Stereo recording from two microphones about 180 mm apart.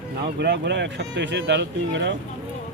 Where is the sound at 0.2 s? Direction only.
70° right (ahead or behind).